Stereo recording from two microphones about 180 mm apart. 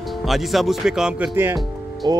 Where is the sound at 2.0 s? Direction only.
20° right (ahead or behind).